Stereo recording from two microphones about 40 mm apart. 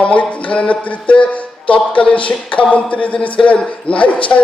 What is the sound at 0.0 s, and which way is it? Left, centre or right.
Speech, left.